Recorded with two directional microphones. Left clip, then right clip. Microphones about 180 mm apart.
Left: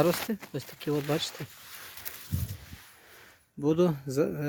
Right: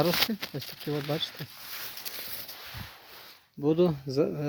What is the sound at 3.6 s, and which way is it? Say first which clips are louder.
Speech: right 1 dB; centre (ahead or behind).